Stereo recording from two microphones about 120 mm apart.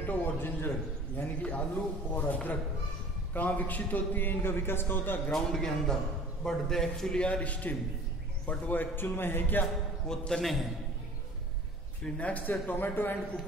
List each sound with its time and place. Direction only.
0.0 s a man's voice: 15° left (ahead or behind)
5.3 s a man's voice: 5° left (ahead or behind)
12.0 s a man's voice: 10° left (ahead or behind)